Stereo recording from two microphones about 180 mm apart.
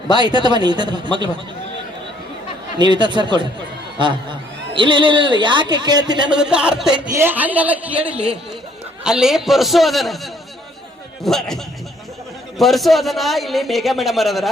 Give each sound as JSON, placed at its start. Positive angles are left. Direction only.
{"t": 0.1, "sound": "a man's voice", "side_deg": -25}
{"t": 2.7, "sound": "a man's voice", "side_deg": -25}
{"t": 6.3, "sound": "a man's voice", "side_deg": -5}
{"t": 6.9, "sound": "a woman's voice", "side_deg": -15}
{"t": 11.2, "sound": "a man's voice", "side_deg": 0}